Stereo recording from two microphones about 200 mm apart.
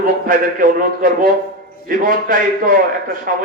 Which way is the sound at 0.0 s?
45° right (ahead or behind).